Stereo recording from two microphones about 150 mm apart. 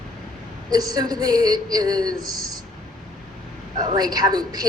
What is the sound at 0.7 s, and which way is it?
Speech, 25° right (ahead or behind).